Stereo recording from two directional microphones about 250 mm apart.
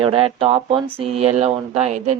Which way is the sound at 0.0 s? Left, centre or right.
Right.